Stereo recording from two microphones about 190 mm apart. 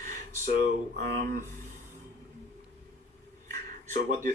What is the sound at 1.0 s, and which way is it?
Speech, 50° right (ahead or behind).